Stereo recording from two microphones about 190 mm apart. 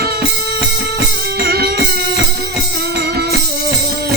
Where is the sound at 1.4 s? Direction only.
55° right (ahead or behind).